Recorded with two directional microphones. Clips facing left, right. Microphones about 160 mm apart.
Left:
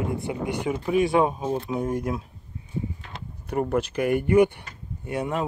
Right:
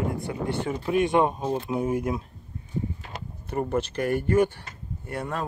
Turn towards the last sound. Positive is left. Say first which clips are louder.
# left 4 dB
turn(degrees=15)  # may be behind; listen again after turning